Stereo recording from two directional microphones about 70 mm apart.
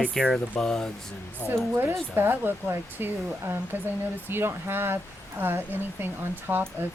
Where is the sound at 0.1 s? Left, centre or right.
Centre.